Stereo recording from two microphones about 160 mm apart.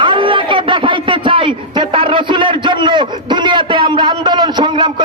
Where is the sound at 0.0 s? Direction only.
30° right (ahead or behind).